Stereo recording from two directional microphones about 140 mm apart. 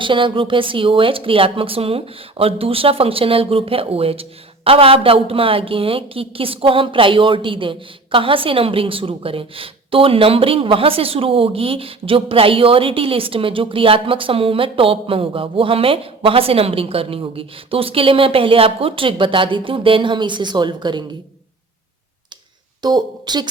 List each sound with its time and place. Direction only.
0.0 s speech: 35° right (ahead or behind)
22.8 s a woman's voice: 30° right (ahead or behind)